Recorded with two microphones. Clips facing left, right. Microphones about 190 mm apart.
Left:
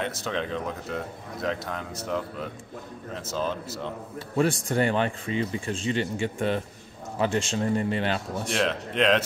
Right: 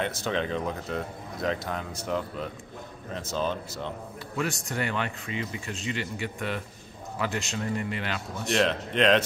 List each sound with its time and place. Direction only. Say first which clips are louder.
0.0 s speech: right 1 dB; centre (ahead or behind)
4.4 s speech: left 7 dB; 30° left (ahead or behind)
8.5 s speech: right 1 dB; centre (ahead or behind)